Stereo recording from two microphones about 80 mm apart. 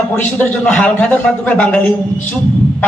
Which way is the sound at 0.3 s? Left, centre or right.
Left.